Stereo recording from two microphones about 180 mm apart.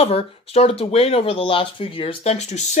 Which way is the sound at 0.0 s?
35° left (ahead or behind).